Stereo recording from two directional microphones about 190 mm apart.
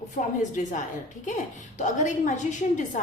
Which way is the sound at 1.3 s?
40° left (ahead or behind).